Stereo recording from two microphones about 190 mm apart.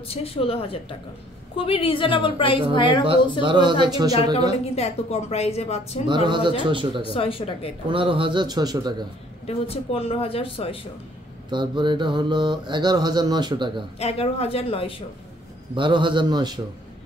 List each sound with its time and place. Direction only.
0.1 s a woman's voice: 30° left (ahead or behind)
3.1 s mantra: 25° right (ahead or behind)
4.7 s speech: 35° left (ahead or behind)
6.0 s mantra: 25° right (ahead or behind)
7.0 s a woman's voice: 30° left (ahead or behind)
7.9 s mantra: 25° right (ahead or behind)
9.7 s speech: 30° left (ahead or behind)
11.5 s mantra: 25° right (ahead or behind)
13.9 s speech: 30° left (ahead or behind)
15.7 s mantra: 25° right (ahead or behind)